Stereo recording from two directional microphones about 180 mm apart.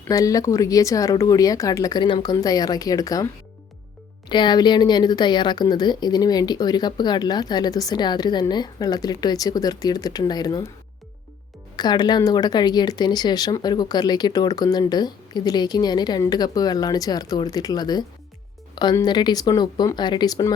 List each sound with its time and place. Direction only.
0.1 s speech: 20° left (ahead or behind)
4.3 s speech: 25° left (ahead or behind)
11.8 s speech: 25° left (ahead or behind)